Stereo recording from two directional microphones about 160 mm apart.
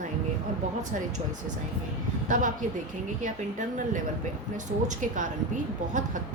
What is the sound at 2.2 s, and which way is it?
Speech, 55° right (ahead or behind).